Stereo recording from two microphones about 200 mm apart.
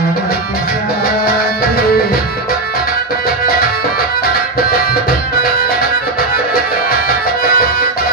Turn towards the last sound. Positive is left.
turn(degrees=50)  # may be behind; listen again after turning